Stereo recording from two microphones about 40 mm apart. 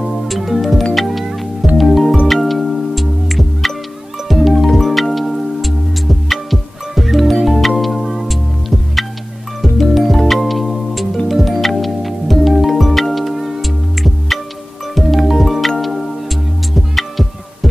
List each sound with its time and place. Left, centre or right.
0.0 s music: centre